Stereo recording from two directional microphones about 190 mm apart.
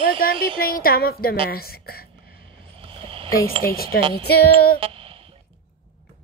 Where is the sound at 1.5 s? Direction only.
50° left (ahead or behind).